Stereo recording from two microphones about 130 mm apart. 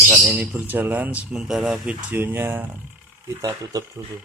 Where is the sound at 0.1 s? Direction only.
10° right (ahead or behind).